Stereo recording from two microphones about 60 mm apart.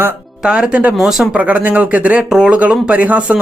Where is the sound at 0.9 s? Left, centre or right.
Centre.